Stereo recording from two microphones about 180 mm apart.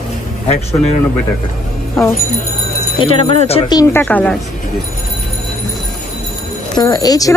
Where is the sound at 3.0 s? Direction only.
30° left (ahead or behind).